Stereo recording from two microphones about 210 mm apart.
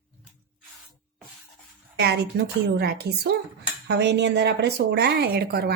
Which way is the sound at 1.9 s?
50° right (ahead or behind).